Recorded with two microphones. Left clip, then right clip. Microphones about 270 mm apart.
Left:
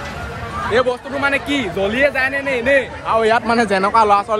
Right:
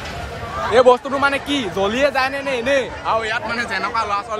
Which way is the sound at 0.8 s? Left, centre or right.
Centre.